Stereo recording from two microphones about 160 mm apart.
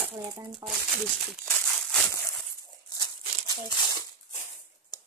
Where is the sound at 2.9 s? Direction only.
25° left (ahead or behind).